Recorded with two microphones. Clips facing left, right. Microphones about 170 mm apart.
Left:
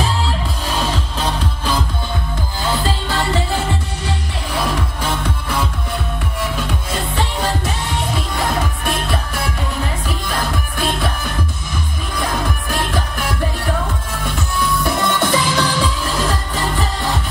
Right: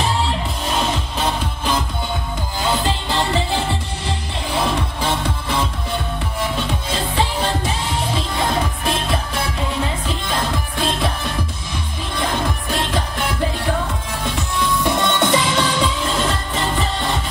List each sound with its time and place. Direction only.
4.6 s music: 30° right (ahead or behind)
8.4 s music: centre (ahead or behind)
12.2 s music: 25° right (ahead or behind)
14.6 s music: 20° right (ahead or behind)